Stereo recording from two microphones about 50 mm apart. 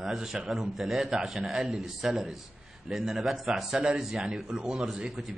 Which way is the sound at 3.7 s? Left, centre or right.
Centre.